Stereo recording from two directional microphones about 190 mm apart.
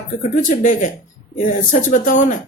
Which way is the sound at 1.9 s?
45° left (ahead or behind).